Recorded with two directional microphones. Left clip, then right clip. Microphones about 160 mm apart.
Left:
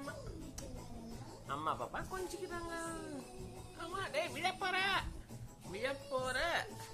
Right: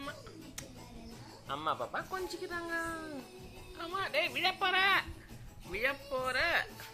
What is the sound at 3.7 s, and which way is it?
Speech, 25° right (ahead or behind).